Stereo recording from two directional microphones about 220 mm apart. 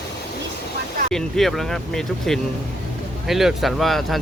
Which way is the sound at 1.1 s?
Centre (ahead or behind).